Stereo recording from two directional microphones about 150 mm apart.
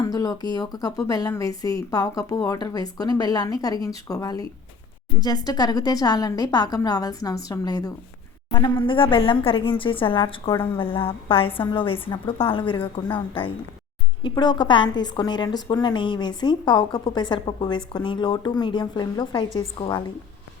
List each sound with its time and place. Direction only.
0.0 s a woman's voice: 25° left (ahead or behind)